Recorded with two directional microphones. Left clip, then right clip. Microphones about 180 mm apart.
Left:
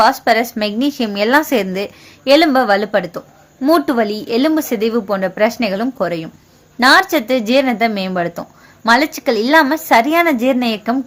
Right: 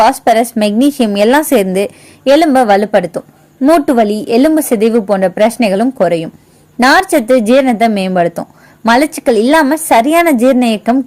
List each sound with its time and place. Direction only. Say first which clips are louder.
0.0 s a woman's voice: right 4 dB; 35° right (ahead or behind)